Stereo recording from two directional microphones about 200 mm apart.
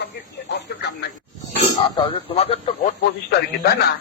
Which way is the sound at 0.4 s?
60° left (ahead or behind).